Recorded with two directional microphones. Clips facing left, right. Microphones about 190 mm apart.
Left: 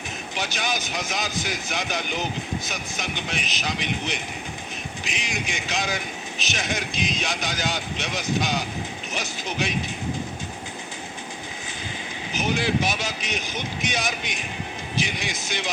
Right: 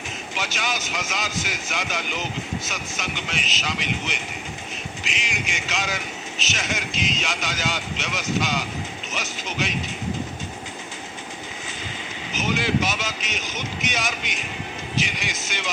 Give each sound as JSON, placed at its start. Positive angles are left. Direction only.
{"t": 0.3, "sound": "speech", "side_deg": 15}
{"t": 12.3, "sound": "speech", "side_deg": 15}